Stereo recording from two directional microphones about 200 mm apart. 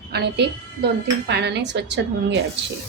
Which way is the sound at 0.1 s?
55° right (ahead or behind).